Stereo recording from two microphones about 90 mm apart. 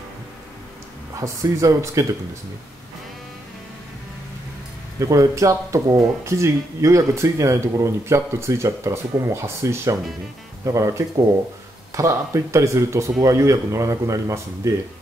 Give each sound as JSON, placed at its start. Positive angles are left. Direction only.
{"t": 1.2, "sound": "speech", "side_deg": -35}
{"t": 4.9, "sound": "speech", "side_deg": -40}